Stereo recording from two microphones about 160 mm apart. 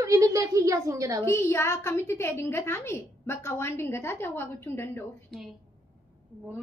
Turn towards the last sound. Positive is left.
turn(degrees=15)  # may be behind; listen again after turning